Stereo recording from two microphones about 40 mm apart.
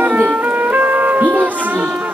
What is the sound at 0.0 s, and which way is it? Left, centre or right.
Music, right.